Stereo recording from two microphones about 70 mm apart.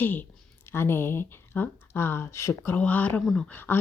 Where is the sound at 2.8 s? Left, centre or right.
Left.